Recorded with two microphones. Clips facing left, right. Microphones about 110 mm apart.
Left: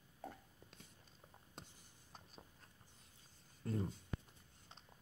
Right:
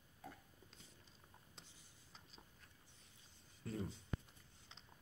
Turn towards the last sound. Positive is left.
turn(degrees=50)  # may be behind; listen again after turning